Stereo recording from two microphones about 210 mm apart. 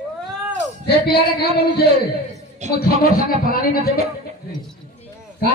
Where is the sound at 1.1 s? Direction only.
50° left (ahead or behind).